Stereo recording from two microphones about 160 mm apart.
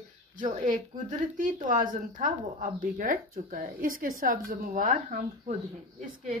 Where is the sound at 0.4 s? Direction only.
50° right (ahead or behind).